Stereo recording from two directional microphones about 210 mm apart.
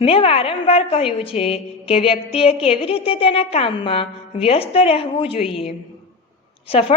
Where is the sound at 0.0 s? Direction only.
25° left (ahead or behind).